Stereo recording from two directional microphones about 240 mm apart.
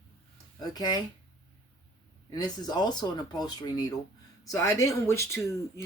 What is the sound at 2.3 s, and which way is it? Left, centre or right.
Speech, centre.